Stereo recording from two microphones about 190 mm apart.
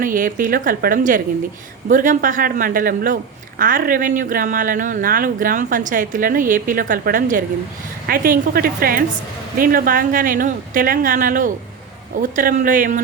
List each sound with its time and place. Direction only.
0.0 s speech: 45° right (ahead or behind)